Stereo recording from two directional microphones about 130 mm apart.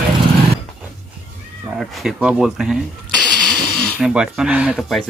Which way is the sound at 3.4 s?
5° left (ahead or behind).